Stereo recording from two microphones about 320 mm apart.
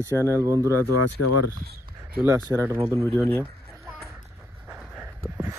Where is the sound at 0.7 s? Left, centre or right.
Left.